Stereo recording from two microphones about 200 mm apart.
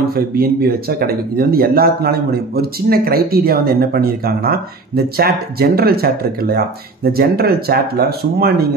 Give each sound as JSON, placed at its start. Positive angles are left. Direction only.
{"t": 0.0, "sound": "speech", "side_deg": -50}